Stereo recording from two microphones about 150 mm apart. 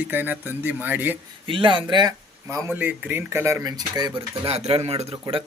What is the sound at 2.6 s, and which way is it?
Speech, 10° right (ahead or behind).